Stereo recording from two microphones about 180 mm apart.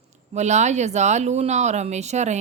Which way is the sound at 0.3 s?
40° right (ahead or behind).